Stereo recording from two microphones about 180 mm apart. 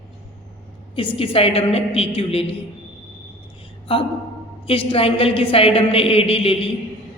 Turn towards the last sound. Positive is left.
turn(degrees=30)  # may be behind; listen again after turning